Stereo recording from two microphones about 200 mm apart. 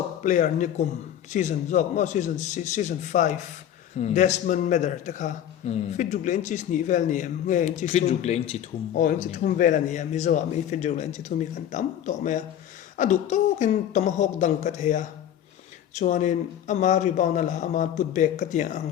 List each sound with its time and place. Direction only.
0.2 s a man's voice: 40° left (ahead or behind)